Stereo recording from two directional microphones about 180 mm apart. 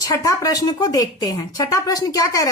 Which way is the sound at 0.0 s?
20° left (ahead or behind).